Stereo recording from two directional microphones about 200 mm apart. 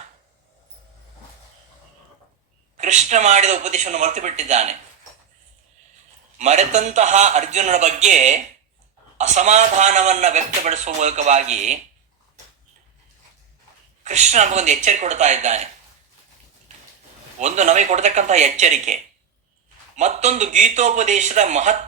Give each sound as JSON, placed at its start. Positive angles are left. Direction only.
{"t": 2.7, "sound": "speech", "side_deg": -35}
{"t": 6.4, "sound": "speech", "side_deg": -35}
{"t": 14.0, "sound": "speech", "side_deg": -35}
{"t": 17.4, "sound": "speech", "side_deg": -35}
{"t": 20.0, "sound": "speech", "side_deg": -35}